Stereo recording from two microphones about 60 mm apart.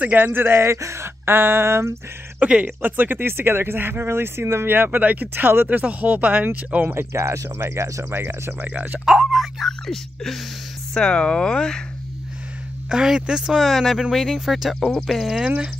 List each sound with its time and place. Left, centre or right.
0.0 s speech: right
0.7 s speech: right
2.4 s speech: right
6.9 s speech: right
8.5 s speech: right
9.0 s speech: centre
12.9 s speech: centre
13.6 s speech: centre
15.4 s speech: centre